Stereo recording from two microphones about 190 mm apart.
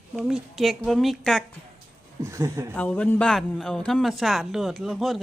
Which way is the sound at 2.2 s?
15° right (ahead or behind).